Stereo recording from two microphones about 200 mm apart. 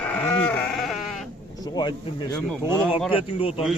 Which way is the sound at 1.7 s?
20° left (ahead or behind).